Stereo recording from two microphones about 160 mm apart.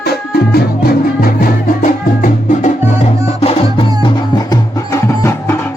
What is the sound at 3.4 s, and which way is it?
Music, 35° left (ahead or behind).